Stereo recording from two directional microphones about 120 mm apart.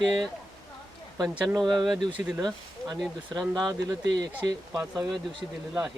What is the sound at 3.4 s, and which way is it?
Speech, 30° right (ahead or behind).